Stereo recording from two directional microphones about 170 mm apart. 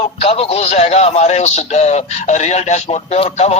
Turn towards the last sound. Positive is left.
turn(degrees=40)  # may be behind; listen again after turning